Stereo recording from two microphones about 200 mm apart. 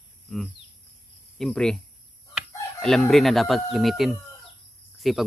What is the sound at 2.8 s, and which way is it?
Speech, 5° left (ahead or behind).